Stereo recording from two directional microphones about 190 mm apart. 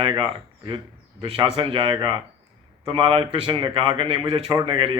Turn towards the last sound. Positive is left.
turn(degrees=-25)  # may be behind; listen again after turning